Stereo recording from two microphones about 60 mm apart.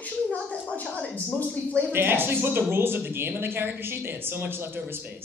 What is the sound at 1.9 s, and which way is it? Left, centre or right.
Speech, right.